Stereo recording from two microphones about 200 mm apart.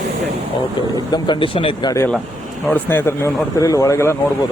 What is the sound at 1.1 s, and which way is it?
Speech, 25° left (ahead or behind).